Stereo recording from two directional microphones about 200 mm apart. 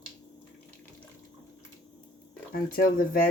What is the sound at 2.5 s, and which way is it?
Speech, 45° left (ahead or behind).